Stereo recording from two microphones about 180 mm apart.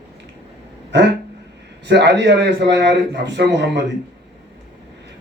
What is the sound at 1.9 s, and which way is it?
Speech, 75° right (ahead or behind).